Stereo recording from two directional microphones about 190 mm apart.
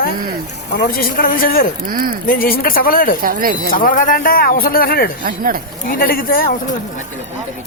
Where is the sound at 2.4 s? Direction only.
50° left (ahead or behind).